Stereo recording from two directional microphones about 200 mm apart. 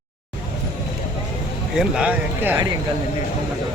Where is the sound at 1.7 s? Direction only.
5° right (ahead or behind).